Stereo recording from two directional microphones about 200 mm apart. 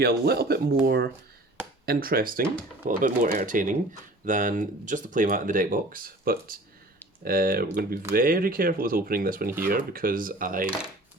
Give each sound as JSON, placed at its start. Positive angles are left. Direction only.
{"t": 0.0, "sound": "speech", "side_deg": -50}